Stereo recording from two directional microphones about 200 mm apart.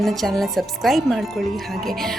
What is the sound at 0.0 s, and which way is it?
A woman's voice, centre (ahead or behind).